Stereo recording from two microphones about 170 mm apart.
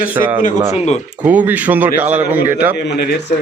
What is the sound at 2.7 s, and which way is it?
Speech, 75° left (ahead or behind).